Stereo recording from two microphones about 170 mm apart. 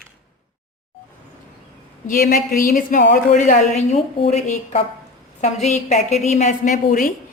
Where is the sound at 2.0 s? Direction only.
50° left (ahead or behind).